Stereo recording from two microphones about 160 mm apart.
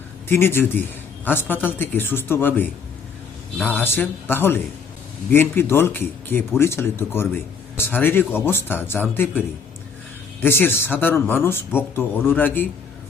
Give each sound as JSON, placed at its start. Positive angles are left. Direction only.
{"t": 0.3, "sound": "speech", "side_deg": 15}
{"t": 10.4, "sound": "speech", "side_deg": 15}